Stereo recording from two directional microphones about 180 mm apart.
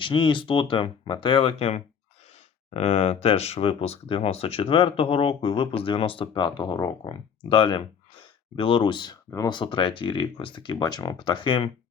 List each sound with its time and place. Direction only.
0.0 s speech: 25° left (ahead or behind)